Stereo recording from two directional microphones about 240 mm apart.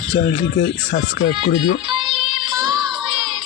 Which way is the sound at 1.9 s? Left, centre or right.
Right.